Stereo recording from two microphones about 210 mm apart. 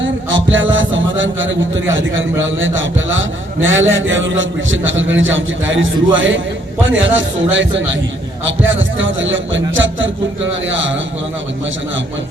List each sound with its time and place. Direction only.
0.0 s a man's voice: 65° right (ahead or behind)